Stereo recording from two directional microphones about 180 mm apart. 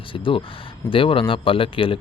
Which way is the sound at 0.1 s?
30° left (ahead or behind).